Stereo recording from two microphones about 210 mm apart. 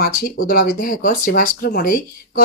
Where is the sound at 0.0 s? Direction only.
45° left (ahead or behind).